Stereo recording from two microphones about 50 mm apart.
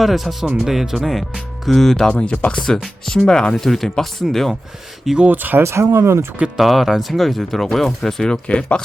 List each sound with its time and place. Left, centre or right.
0.0 s speech: centre
2.1 s speech: left; by 4.5 s centre
5.3 s speech: right
5.6 s speech: right
6.6 s speech: centre